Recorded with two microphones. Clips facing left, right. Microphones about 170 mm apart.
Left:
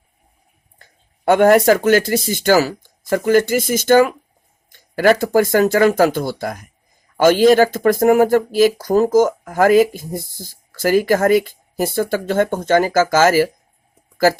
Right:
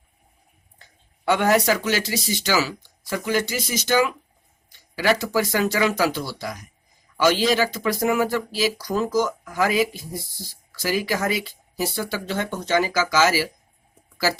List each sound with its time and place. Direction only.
0.8 s speech: 50° left (ahead or behind)